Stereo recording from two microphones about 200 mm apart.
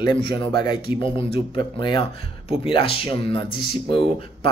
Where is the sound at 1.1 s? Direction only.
25° left (ahead or behind).